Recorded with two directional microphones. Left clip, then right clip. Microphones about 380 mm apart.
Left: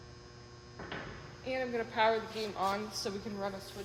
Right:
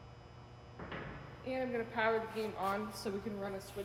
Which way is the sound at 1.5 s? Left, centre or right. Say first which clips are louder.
Left 2 dB; left.